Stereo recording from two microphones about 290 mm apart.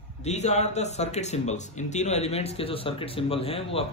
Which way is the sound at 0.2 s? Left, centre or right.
Left.